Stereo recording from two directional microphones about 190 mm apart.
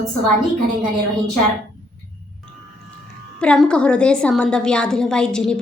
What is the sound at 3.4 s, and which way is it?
A woman's voice, 5° left (ahead or behind).